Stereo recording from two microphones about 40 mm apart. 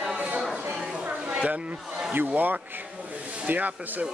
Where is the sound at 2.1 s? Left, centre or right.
Right.